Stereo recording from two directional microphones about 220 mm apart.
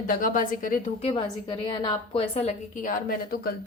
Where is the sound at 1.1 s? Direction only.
20° left (ahead or behind).